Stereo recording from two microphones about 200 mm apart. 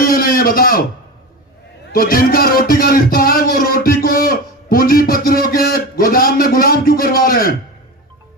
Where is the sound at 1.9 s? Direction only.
45° left (ahead or behind).